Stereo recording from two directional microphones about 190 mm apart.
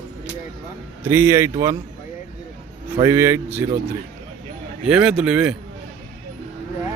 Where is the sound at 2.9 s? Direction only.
15° right (ahead or behind).